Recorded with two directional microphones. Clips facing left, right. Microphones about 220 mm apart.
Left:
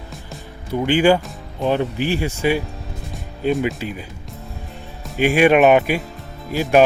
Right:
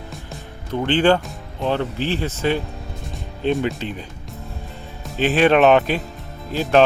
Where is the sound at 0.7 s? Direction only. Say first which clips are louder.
Left 1 dB; 10° left (ahead or behind).